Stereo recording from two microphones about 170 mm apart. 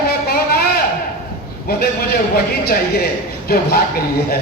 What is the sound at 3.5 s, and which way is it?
Speech, 65° left (ahead or behind).